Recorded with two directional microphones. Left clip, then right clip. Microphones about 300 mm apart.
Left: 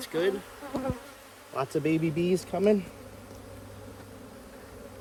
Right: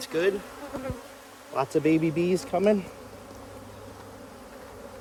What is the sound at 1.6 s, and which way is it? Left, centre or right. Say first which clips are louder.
Speech: right 4 dB; right.